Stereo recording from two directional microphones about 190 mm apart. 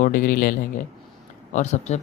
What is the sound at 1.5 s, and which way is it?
Speech, 35° left (ahead or behind).